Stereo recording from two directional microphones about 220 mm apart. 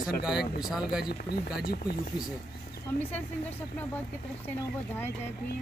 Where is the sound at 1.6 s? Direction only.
45° left (ahead or behind).